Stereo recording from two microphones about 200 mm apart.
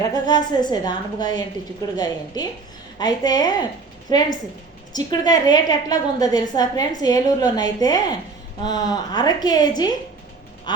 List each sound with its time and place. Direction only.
0.1 s a woman's voice: 20° left (ahead or behind)
10.7 s quack: 20° left (ahead or behind)